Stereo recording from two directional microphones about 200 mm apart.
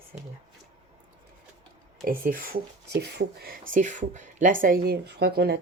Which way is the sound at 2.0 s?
45° right (ahead or behind).